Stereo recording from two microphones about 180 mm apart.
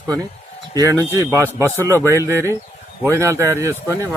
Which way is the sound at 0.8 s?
20° right (ahead or behind).